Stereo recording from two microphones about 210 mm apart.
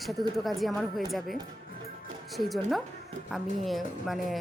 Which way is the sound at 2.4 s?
Centre (ahead or behind).